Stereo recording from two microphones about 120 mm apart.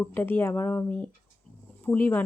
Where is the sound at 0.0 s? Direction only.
15° left (ahead or behind).